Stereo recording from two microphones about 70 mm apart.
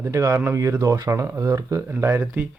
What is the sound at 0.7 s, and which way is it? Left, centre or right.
Speech, right.